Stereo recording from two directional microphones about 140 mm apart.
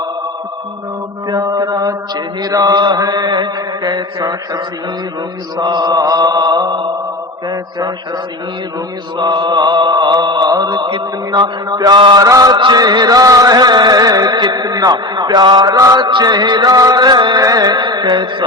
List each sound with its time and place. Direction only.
1.3 s mantra: 25° right (ahead or behind)
9.1 s mantra: 35° right (ahead or behind)